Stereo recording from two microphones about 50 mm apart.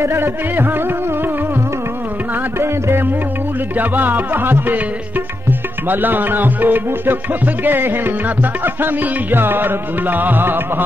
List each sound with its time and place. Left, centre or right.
0.0 s music: right
0.6 s music: right
2.6 s music: right
3.7 s music: right